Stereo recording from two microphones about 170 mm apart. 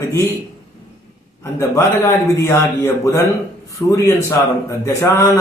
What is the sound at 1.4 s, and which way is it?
A man's voice, 15° left (ahead or behind).